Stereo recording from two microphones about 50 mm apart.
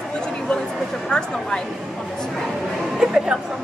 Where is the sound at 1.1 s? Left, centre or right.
Centre.